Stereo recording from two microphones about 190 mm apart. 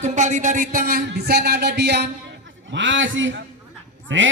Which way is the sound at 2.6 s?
75° right (ahead or behind).